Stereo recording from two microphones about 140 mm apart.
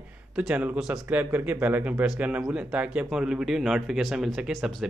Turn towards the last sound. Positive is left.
turn(degrees=0)  # may be behind; listen again after turning